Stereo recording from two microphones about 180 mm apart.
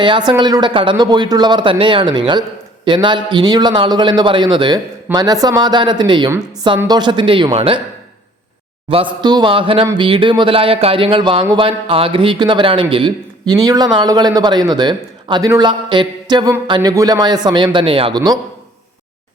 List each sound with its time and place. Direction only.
0.0 s a man's voice: 25° right (ahead or behind)
8.9 s a man's voice: 30° right (ahead or behind)